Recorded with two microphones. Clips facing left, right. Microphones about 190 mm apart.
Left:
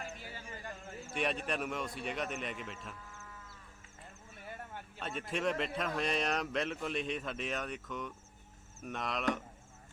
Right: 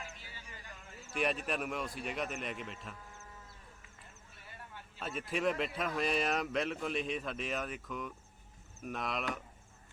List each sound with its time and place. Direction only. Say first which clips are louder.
0.0 s a sound: left 5 dB; 50° left (ahead or behind)
1.1 s speech: right 1 dB; centre (ahead or behind)
4.9 s a man's voice: right 1 dB; centre (ahead or behind)